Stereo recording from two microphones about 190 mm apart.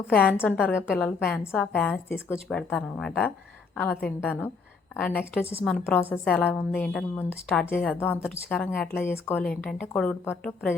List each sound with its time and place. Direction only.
0.1 s a woman's voice: 10° left (ahead or behind)